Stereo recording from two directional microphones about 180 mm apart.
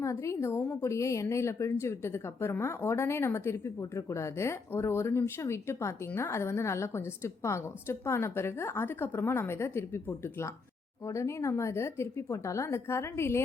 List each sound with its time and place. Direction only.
0.0 s a woman's voice: 15° left (ahead or behind)